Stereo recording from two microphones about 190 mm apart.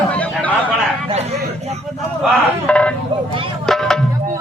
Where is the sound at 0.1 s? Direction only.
5° left (ahead or behind).